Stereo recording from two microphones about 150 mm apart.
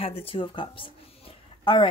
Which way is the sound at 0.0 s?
40° left (ahead or behind).